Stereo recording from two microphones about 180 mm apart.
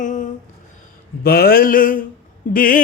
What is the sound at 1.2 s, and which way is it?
Mantra, 60° left (ahead or behind).